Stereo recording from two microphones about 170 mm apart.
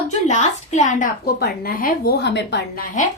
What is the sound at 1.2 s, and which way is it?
A woman's voice, 70° left (ahead or behind).